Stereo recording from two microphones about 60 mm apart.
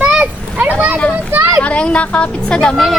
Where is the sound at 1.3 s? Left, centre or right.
Right.